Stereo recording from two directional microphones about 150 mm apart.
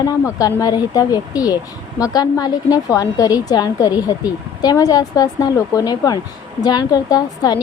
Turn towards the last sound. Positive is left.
turn(degrees=25)  # may be behind; listen again after turning